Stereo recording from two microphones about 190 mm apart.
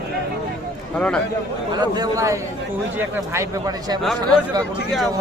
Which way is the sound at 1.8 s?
20° right (ahead or behind).